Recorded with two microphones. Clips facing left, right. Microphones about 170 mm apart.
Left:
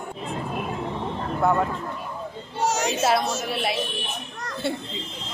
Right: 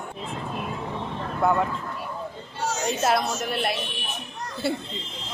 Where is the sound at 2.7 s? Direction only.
90° left.